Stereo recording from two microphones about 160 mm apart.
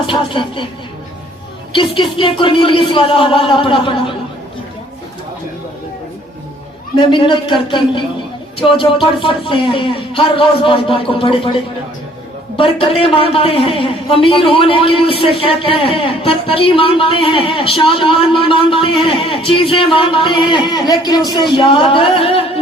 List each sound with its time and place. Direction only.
0.0 s a man's voice: 30° left (ahead or behind)
1.7 s a man's voice: 30° left (ahead or behind)
6.9 s a man's voice: 30° left (ahead or behind)
12.5 s a man's voice: 35° left (ahead or behind)